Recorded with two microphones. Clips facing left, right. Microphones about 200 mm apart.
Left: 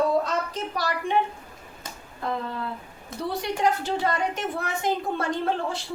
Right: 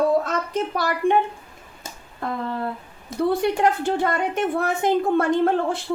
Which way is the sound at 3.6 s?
55° right (ahead or behind).